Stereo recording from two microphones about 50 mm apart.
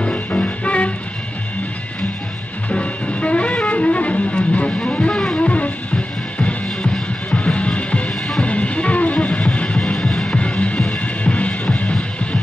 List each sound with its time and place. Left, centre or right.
0.0 s music: left
2.7 s music: left
7.4 s music: left
9.9 s music: centre; by 11.9 s left